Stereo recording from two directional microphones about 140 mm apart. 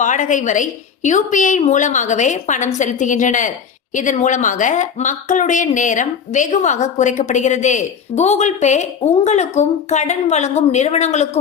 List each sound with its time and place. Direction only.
0.0 s a woman's voice: 65° left (ahead or behind)